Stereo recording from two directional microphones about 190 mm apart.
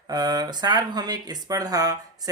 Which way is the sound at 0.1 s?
20° right (ahead or behind).